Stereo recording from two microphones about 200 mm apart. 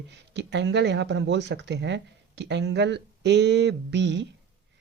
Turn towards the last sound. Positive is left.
turn(degrees=-60)  # may be behind; listen again after turning